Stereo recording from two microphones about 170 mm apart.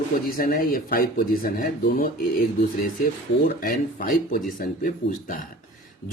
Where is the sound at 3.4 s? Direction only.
55° left (ahead or behind).